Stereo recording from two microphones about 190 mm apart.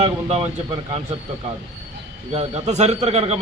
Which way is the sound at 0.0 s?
35° right (ahead or behind).